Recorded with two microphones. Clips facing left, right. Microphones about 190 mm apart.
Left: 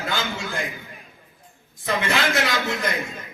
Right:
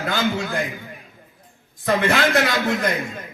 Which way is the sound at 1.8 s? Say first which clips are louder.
Right 5 dB; 50° right (ahead or behind).